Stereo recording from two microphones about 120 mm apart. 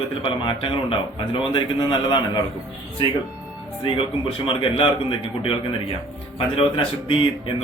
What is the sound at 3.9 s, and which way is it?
Speech, 45° left (ahead or behind).